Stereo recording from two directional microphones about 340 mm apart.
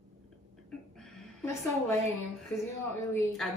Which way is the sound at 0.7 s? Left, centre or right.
Centre.